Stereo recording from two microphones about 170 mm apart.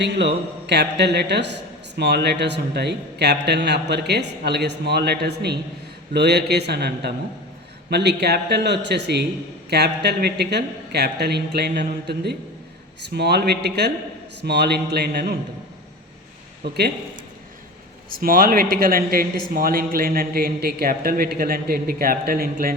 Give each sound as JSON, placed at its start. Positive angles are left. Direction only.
{"t": 0.0, "sound": "a man's voice", "side_deg": -90}
{"t": 18.2, "sound": "a man's voice", "side_deg": -60}